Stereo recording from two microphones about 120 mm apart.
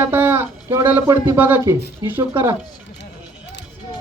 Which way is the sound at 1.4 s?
15° right (ahead or behind).